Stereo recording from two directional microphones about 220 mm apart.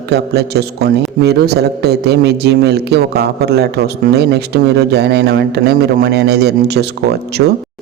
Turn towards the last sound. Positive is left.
turn(degrees=-50)  # may be behind; listen again after turning